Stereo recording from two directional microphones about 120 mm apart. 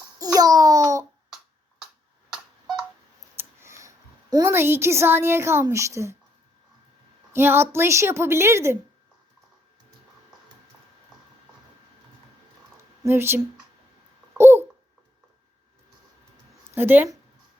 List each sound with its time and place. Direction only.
0.3 s a sound: 30° right (ahead or behind)
3.3 s a sound: 25° right (ahead or behind)
4.5 s a woman's voice: 20° right (ahead or behind)
7.3 s a woman's voice: 20° right (ahead or behind)
13.1 s a woman's voice: 20° right (ahead or behind)
14.3 s babbling: 20° right (ahead or behind)
16.7 s speech: 15° right (ahead or behind)